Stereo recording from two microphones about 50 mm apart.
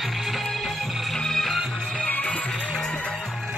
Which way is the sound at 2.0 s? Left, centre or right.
Left.